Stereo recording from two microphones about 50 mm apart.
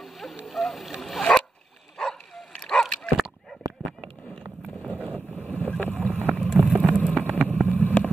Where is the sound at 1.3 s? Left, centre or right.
Left.